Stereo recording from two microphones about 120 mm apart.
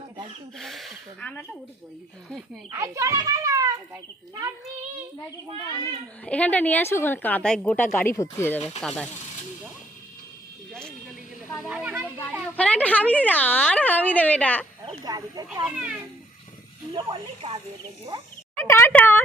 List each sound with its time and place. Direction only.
0.6 s speech: centre (ahead or behind)
1.2 s speech: 10° left (ahead or behind)
2.7 s a child's voice: 25° right (ahead or behind)
5.5 s speech: 50° right (ahead or behind)
6.2 s speech: 10° left (ahead or behind)
11.7 s speech: 15° right (ahead or behind)
12.5 s speech: 10° left (ahead or behind)
15.0 s speech: 35° right (ahead or behind)
15.6 s speech: 10° right (ahead or behind)
16.9 s speech: 45° right (ahead or behind)
18.5 s speech: 20° left (ahead or behind)